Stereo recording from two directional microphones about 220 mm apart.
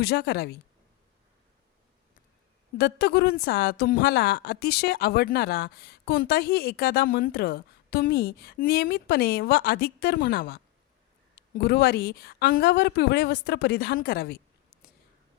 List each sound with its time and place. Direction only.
0.0 s a woman's voice: 50° left (ahead or behind)
2.7 s a woman's voice: 45° left (ahead or behind)